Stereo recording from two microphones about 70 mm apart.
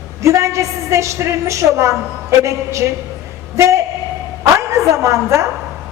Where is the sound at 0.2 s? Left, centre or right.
Right.